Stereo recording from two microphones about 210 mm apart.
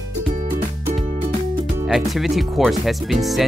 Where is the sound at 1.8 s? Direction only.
Centre (ahead or behind).